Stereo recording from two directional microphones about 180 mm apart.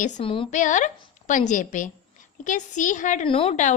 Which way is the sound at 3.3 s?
35° left (ahead or behind).